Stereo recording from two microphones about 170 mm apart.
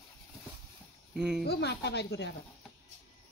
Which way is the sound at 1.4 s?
75° left (ahead or behind).